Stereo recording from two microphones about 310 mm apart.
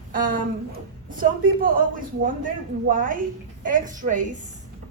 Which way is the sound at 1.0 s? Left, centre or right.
Right.